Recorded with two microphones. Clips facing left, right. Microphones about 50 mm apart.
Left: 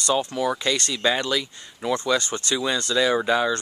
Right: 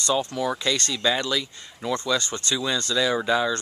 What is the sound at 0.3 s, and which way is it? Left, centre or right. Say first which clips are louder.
Speech: left 2 dB; left.